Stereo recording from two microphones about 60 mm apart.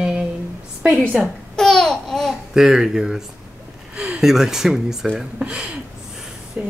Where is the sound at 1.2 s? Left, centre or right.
Centre.